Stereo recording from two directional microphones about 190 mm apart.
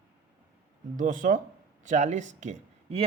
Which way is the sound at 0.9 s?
45° right (ahead or behind).